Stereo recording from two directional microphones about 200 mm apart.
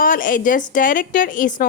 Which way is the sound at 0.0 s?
45° left (ahead or behind).